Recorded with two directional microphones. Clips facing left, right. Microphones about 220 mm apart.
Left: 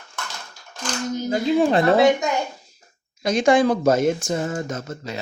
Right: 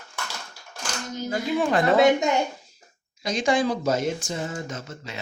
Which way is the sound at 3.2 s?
55° left (ahead or behind).